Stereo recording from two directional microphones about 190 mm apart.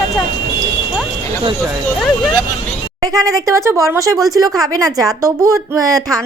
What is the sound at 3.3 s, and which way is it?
Speech, 15° right (ahead or behind).